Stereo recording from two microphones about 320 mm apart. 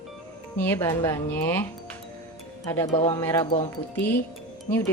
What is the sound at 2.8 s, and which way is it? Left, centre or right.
Speech, centre.